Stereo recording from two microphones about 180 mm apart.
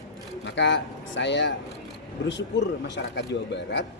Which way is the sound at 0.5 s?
85° left.